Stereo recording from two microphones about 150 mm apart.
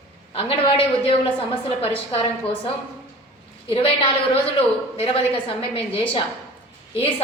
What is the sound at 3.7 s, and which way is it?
A woman's voice, 40° left (ahead or behind).